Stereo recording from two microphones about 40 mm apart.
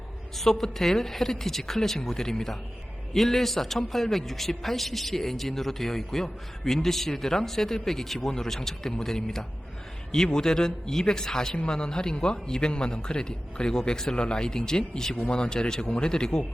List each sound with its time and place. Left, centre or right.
0.3 s a man's voice: centre